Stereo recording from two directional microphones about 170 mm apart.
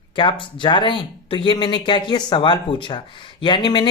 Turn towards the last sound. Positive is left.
turn(degrees=25)  # may be behind; listen again after turning